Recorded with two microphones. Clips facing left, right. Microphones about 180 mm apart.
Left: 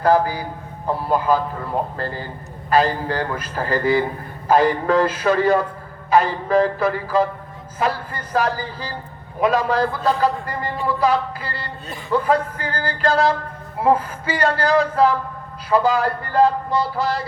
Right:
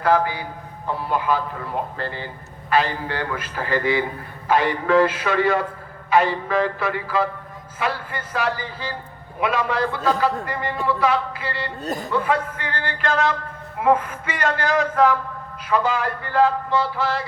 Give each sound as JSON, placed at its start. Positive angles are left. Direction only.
{"t": 0.0, "sound": "a man's voice", "side_deg": 40}
{"t": 11.9, "sound": "a man's voice", "side_deg": -40}
{"t": 12.1, "sound": "a man's voice", "side_deg": 40}